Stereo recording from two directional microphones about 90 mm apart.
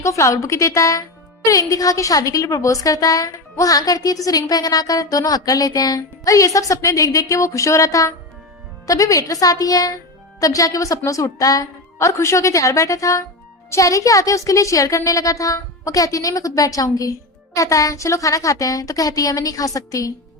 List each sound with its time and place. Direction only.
0.0 s a woman's voice: 35° left (ahead or behind)